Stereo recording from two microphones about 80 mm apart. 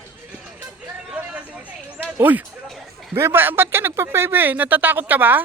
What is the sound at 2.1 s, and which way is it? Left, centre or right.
Speech, right.